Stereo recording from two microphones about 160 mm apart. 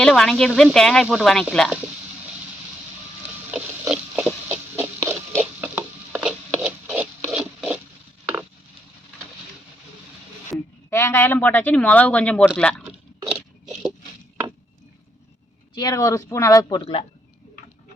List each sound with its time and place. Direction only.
0.0 s speech: 5° left (ahead or behind)
3.5 s a sound: 10° right (ahead or behind)
10.5 s speech: 15° left (ahead or behind)
13.3 s a sound: centre (ahead or behind)
15.7 s speech: 25° left (ahead or behind)
16.8 s speech: 40° left (ahead or behind)